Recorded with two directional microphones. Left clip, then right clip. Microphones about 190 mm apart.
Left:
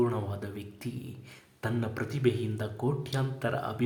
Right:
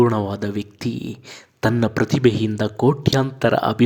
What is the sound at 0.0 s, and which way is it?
Speech, 40° right (ahead or behind).